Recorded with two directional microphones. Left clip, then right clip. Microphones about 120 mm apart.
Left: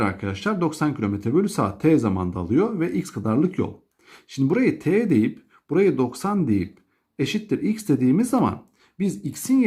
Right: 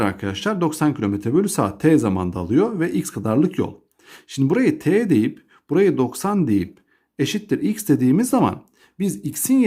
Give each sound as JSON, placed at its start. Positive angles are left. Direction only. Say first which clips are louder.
{"t": 0.0, "sound": "speech", "louder": "right 3 dB", "side_deg": -30}